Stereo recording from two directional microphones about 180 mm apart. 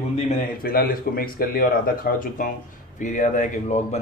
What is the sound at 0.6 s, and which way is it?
Speech, 55° left (ahead or behind).